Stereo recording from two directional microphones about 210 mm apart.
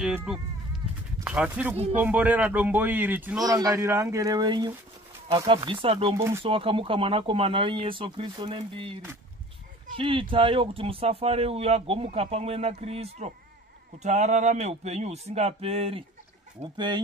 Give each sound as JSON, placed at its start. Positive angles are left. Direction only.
{"t": 0.0, "sound": "speech", "side_deg": -5}
{"t": 6.1, "sound": "speech", "side_deg": -10}
{"t": 6.4, "sound": "speech", "side_deg": -25}
{"t": 9.9, "sound": "speech", "side_deg": -25}